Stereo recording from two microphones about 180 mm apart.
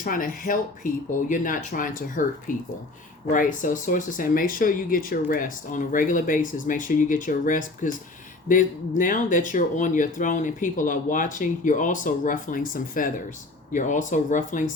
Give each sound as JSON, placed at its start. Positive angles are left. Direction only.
{"t": 0.0, "sound": "speech", "side_deg": 50}